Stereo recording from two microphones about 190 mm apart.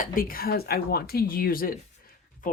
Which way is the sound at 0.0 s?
45° left (ahead or behind).